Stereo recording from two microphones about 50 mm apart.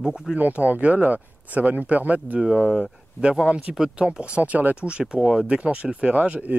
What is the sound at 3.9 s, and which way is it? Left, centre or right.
Speech, right.